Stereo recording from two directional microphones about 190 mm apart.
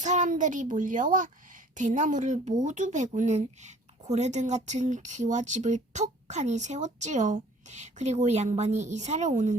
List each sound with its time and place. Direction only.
0.0 s a child's voice: 40° right (ahead or behind)